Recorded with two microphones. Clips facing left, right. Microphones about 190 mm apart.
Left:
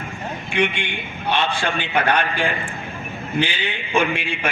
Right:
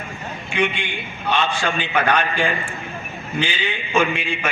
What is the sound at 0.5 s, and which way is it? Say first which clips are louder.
A man's voice: even; 60° left (ahead or behind).